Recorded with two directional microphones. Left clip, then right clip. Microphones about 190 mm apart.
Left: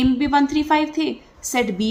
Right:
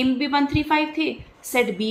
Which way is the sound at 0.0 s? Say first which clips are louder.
Left 3 dB; 35° left (ahead or behind).